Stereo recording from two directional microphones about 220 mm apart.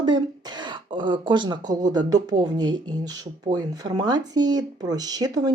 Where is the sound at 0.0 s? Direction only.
20° right (ahead or behind).